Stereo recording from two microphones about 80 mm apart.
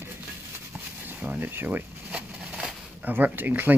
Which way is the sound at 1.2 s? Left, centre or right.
Right.